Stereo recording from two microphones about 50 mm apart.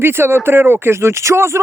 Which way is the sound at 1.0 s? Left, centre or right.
Right.